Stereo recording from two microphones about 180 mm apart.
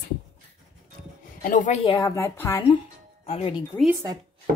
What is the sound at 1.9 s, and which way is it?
Speech, 20° left (ahead or behind).